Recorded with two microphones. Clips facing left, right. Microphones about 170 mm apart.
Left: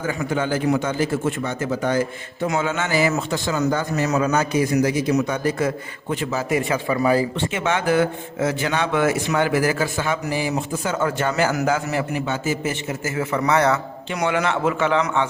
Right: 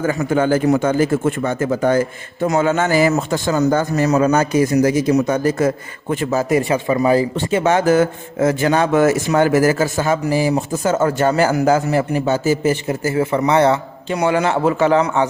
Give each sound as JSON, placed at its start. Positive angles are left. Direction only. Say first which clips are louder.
{"t": 0.1, "sound": "a man's voice", "louder": "right 6 dB", "side_deg": -45}
{"t": 7.3, "sound": "speech", "louder": "right 7 dB", "side_deg": -40}